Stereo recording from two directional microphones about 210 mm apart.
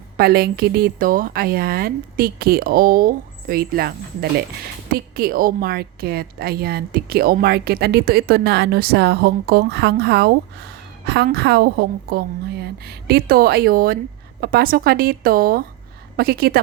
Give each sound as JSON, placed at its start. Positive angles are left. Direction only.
{"t": 0.2, "sound": "a woman's voice", "side_deg": -50}